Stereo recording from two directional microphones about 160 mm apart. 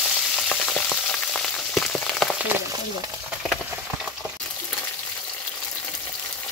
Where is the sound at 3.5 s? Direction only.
5° right (ahead or behind).